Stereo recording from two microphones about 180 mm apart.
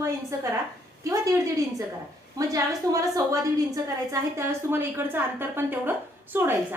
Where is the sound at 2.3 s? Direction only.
20° right (ahead or behind).